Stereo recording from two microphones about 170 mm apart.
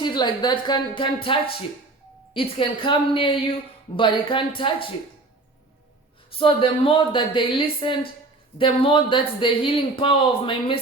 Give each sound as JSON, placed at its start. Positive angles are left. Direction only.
{"t": 0.0, "sound": "a woman's voice", "side_deg": 25}
{"t": 6.4, "sound": "speech", "side_deg": 30}